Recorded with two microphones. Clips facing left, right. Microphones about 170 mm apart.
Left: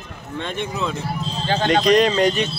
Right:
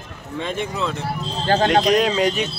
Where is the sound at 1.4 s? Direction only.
45° right (ahead or behind).